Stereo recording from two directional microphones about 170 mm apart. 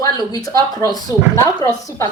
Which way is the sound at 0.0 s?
20° left (ahead or behind).